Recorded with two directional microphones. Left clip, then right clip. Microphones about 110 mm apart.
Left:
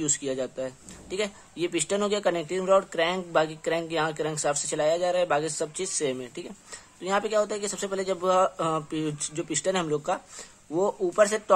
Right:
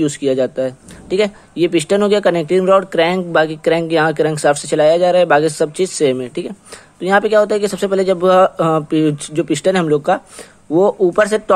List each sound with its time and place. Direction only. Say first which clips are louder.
0.0 s speech: right 14 dB; 30° right (ahead or behind)